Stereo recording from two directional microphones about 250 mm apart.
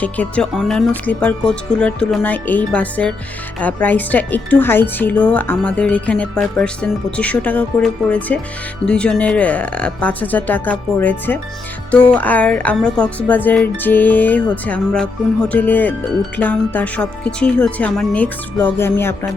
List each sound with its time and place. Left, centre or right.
0.0 s speech: centre